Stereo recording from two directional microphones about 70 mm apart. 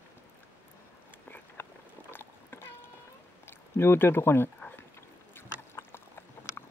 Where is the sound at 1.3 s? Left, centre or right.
Left.